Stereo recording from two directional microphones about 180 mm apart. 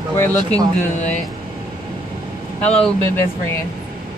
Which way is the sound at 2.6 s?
5° left (ahead or behind).